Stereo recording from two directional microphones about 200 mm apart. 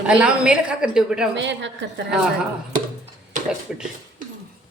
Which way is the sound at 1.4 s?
60° right (ahead or behind).